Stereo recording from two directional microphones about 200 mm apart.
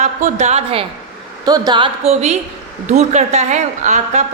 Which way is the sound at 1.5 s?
20° right (ahead or behind).